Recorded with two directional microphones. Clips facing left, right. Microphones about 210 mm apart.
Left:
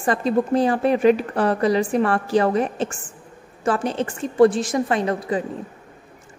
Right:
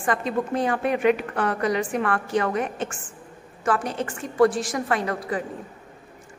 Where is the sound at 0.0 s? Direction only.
30° left (ahead or behind).